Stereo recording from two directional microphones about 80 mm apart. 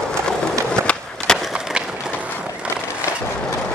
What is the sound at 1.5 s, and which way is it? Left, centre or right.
Wood, centre.